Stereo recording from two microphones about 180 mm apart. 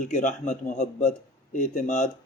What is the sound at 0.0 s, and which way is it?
A man's voice, 45° left (ahead or behind).